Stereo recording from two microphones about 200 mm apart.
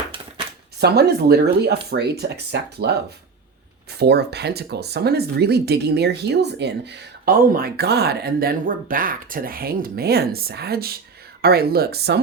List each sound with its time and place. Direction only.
0.8 s speech: 55° right (ahead or behind)
3.9 s speech: 55° right (ahead or behind)